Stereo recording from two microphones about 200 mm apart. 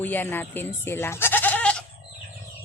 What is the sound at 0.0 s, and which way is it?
Speech, 10° left (ahead or behind).